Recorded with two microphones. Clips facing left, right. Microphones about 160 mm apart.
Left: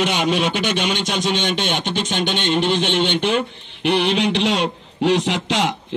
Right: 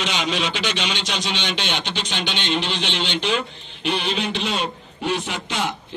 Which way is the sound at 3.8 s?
70° left (ahead or behind).